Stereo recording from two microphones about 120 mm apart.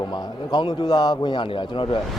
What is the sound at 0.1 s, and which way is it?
A man's voice, 35° left (ahead or behind).